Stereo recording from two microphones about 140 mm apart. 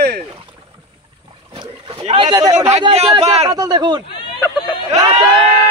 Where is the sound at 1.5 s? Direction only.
35° right (ahead or behind).